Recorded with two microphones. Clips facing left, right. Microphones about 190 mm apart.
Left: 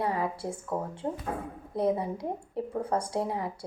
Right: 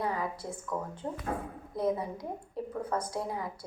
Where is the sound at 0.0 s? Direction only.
30° left (ahead or behind).